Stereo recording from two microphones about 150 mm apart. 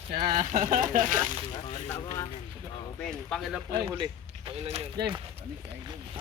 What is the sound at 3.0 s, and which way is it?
Speech, 5° left (ahead or behind).